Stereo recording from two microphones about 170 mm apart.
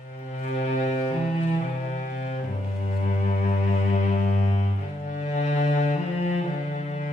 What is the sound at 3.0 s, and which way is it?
Music, 45° left (ahead or behind).